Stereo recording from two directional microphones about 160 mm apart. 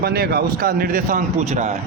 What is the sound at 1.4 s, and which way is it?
Speech, 40° right (ahead or behind).